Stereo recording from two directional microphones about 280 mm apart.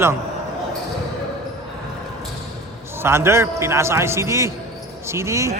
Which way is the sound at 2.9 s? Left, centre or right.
Centre.